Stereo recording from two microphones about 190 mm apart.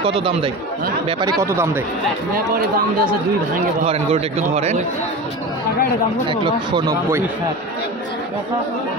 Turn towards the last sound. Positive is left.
turn(degrees=-15)  # may be behind; listen again after turning